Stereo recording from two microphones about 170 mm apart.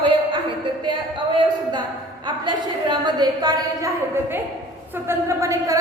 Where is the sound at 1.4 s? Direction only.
25° right (ahead or behind).